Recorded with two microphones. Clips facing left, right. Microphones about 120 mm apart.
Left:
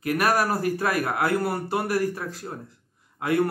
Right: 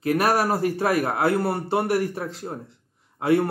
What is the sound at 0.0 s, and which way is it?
A man's voice, 25° right (ahead or behind).